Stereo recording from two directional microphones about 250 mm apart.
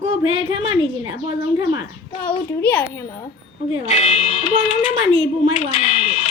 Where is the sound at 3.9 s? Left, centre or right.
Left.